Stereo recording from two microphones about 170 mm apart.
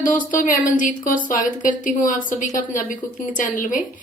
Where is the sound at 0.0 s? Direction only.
50° left (ahead or behind).